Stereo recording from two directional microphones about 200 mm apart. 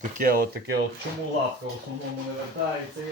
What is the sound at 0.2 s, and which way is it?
Speech, 45° right (ahead or behind).